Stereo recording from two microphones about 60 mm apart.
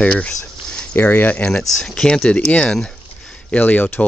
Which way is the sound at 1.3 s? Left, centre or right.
Centre.